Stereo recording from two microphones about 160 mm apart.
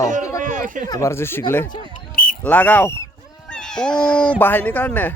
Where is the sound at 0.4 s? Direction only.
55° right (ahead or behind).